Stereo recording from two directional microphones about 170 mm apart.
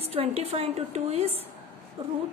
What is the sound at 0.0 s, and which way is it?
A woman's voice, 35° right (ahead or behind).